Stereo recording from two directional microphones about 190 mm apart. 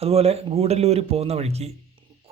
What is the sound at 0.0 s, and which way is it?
A man's voice, 30° right (ahead or behind).